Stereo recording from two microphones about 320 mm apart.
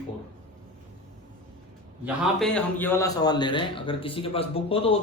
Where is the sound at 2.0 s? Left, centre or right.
Centre.